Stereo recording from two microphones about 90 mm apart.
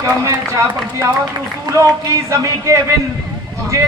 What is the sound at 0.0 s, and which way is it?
Speech, 35° right (ahead or behind).